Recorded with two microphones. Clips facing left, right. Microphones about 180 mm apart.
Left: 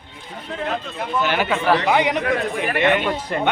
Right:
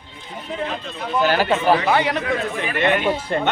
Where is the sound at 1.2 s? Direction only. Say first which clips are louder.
Right 4 dB; 35° right (ahead or behind).